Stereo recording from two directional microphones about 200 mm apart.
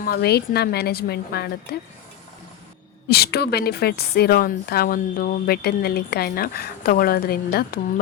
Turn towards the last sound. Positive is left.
turn(degrees=50)  # may be behind; listen again after turning